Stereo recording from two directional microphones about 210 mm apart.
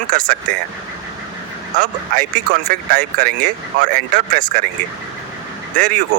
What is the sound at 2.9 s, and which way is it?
Speech, 50° right (ahead or behind).